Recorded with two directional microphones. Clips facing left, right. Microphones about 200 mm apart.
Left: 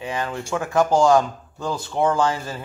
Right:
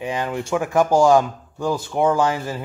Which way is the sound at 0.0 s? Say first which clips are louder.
Right 3 dB; 15° right (ahead or behind).